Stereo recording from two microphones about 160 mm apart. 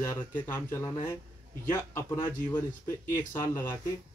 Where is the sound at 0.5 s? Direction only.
15° left (ahead or behind).